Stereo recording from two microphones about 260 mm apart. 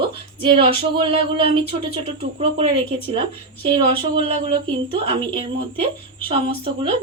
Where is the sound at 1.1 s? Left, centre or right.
Left.